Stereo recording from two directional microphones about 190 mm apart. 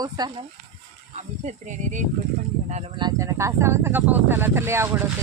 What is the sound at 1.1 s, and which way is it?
Speech, 40° right (ahead or behind).